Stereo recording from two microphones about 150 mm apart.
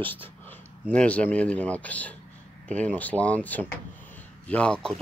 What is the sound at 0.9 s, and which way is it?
Speech, 10° left (ahead or behind).